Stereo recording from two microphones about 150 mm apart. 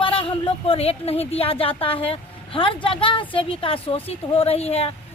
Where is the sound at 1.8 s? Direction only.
35° left (ahead or behind).